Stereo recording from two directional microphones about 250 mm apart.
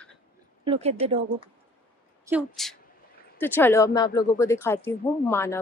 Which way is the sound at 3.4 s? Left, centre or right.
Centre.